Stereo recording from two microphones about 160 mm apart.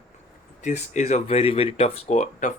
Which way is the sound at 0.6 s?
45° left (ahead or behind).